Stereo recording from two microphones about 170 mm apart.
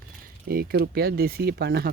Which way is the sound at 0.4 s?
60° right (ahead or behind).